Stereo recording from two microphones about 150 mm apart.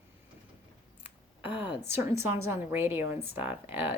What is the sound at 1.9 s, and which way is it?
A woman's voice, 15° right (ahead or behind).